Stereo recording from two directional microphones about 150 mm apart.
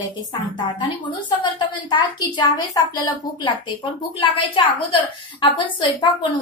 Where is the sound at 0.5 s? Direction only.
30° left (ahead or behind).